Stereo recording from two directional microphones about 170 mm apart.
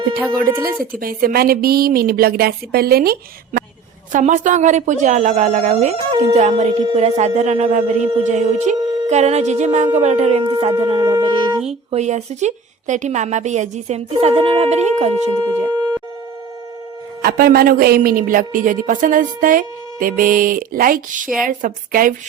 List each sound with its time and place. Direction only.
0.6 s speech: 60° right (ahead or behind)
4.1 s a woman's voice: 45° right (ahead or behind); by 11.4 s 30° right (ahead or behind)
11.9 s a woman's voice: 40° right (ahead or behind)
17.2 s a woman's voice: 60° right (ahead or behind)